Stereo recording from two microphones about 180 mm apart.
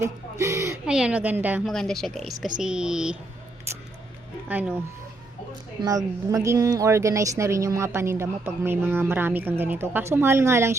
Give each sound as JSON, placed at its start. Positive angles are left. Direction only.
{"t": 0.0, "sound": "a sound", "side_deg": -15}
{"t": 0.9, "sound": "a woman's voice", "side_deg": -5}
{"t": 4.4, "sound": "a woman's voice", "side_deg": -10}
{"t": 5.8, "sound": "a woman's voice", "side_deg": -20}